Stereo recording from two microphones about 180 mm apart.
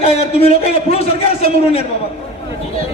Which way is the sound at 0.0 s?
35° left (ahead or behind).